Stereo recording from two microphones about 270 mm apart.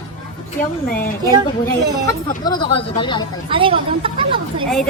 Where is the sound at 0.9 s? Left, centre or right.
Left.